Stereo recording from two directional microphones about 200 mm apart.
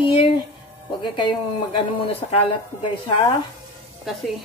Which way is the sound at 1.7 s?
30° left (ahead or behind).